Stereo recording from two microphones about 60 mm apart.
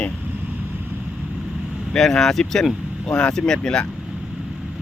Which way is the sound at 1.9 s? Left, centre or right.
Centre.